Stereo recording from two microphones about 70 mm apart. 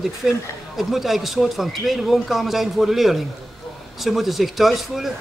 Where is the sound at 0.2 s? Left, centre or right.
Centre.